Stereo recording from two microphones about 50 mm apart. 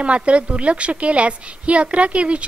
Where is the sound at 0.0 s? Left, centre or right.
Right.